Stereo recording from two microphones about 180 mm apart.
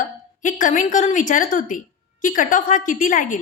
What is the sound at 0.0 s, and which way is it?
A woman's voice, 45° left (ahead or behind).